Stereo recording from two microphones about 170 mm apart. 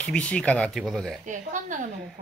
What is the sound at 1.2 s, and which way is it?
Speech, 50° right (ahead or behind).